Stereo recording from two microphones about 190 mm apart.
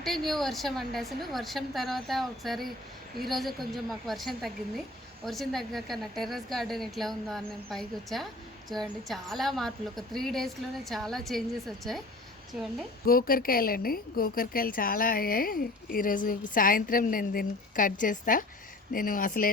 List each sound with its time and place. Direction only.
0.3 s a woman's voice: centre (ahead or behind)
13.1 s a woman's voice: 50° left (ahead or behind)